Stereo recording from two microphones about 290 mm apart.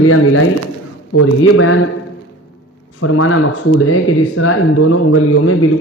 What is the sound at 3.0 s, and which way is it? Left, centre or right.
Speech, left.